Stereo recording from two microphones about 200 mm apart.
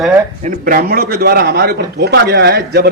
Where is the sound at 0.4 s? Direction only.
45° right (ahead or behind).